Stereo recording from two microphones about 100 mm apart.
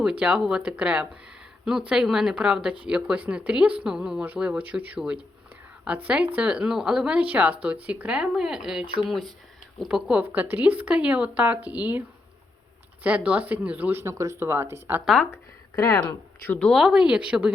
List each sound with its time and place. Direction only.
0.0 s speech: 10° right (ahead or behind)
14.0 s speech: 30° right (ahead or behind)
15.0 s speech: 5° left (ahead or behind)
16.0 s speech: 15° left (ahead or behind)
16.6 s speech: centre (ahead or behind)